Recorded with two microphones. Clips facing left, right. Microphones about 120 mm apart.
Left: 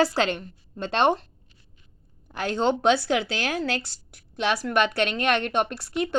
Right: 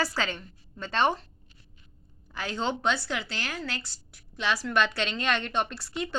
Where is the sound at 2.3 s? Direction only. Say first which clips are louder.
Left 7 dB; 60° left (ahead or behind).